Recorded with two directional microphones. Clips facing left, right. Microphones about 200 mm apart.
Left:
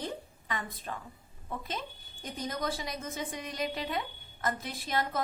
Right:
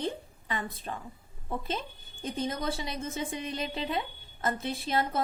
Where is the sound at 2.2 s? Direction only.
25° right (ahead or behind).